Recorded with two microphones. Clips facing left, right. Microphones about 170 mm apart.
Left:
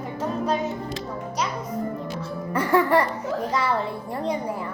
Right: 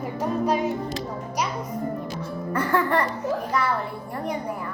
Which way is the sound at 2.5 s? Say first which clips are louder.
Left 3 dB; 20° left (ahead or behind).